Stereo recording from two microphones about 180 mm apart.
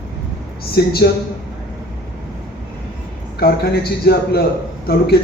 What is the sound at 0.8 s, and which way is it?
Speech, 60° left (ahead or behind).